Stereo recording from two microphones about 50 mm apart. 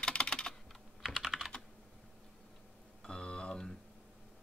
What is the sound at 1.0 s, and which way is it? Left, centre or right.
Computer keyboard, centre.